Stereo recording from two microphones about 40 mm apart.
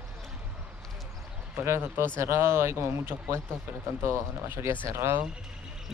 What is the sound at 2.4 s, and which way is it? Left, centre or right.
Speech, right.